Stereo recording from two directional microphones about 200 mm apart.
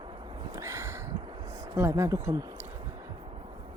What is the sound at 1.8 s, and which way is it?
Speech, 10° right (ahead or behind).